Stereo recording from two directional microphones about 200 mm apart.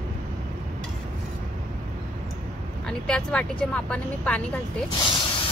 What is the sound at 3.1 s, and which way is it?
Speech, 5° left (ahead or behind).